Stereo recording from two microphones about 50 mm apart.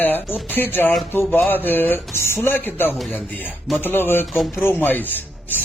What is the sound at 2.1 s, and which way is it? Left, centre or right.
Speech, left.